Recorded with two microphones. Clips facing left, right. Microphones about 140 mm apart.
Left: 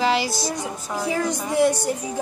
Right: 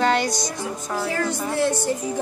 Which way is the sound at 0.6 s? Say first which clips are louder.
Right 1 dB; 15° left (ahead or behind).